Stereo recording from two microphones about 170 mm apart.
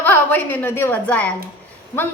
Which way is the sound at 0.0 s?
10° left (ahead or behind).